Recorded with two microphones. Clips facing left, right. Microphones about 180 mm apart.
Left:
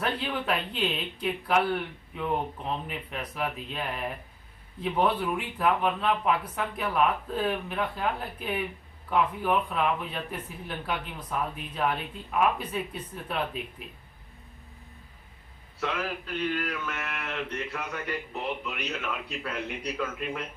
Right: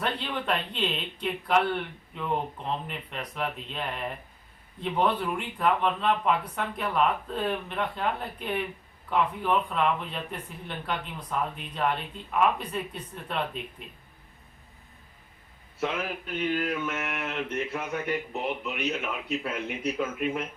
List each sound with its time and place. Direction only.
0.0 s speech: 5° left (ahead or behind)
15.8 s mantra: 25° right (ahead or behind)